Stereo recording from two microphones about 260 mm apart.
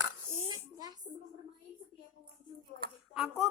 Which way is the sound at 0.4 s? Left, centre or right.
Centre.